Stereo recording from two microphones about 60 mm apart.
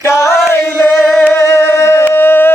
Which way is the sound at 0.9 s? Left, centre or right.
Centre.